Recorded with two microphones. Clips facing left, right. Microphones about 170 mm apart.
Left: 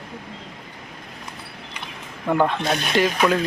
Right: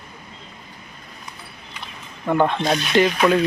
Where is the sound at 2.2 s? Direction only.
5° left (ahead or behind).